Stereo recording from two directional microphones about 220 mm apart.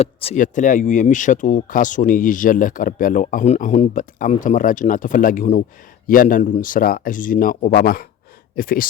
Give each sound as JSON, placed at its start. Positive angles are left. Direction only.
{"t": 0.0, "sound": "speech", "side_deg": 25}